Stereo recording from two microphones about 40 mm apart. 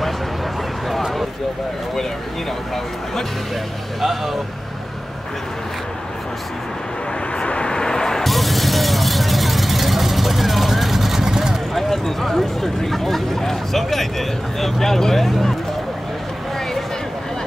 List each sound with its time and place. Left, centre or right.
4.0 s speech: centre
7.3 s vehicle: left
8.3 s vehicle: centre
11.7 s speech: centre